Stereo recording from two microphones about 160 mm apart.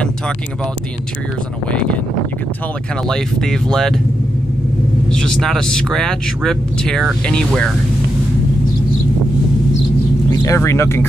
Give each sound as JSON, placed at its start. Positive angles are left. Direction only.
{"t": 1.7, "sound": "speech", "side_deg": 5}
{"t": 3.1, "sound": "speech", "side_deg": 5}
{"t": 5.1, "sound": "speech", "side_deg": 5}
{"t": 10.3, "sound": "speech", "side_deg": 20}